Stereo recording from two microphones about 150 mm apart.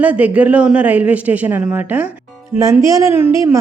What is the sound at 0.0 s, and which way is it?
A woman's voice, 10° right (ahead or behind).